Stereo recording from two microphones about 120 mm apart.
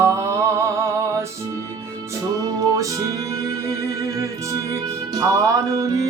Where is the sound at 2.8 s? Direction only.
30° right (ahead or behind).